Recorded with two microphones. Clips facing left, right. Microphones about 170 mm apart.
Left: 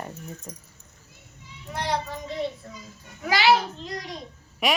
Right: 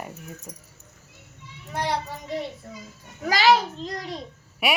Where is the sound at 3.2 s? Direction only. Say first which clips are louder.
Right 1 dB; 40° right (ahead or behind).